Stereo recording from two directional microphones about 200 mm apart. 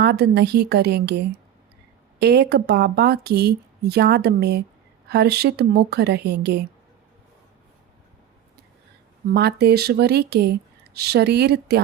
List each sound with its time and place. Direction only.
0.0 s a woman's voice: 55° right (ahead or behind)
9.3 s speech: 55° right (ahead or behind)